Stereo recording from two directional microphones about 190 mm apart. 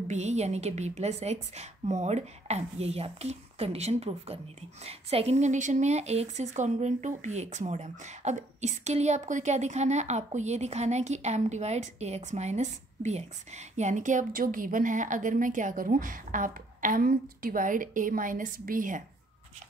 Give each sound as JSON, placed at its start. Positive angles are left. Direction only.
{"t": 0.1, "sound": "a woman's voice", "side_deg": -35}